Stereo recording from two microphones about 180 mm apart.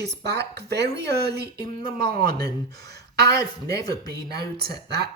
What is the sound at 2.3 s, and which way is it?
Speech, 65° right (ahead or behind).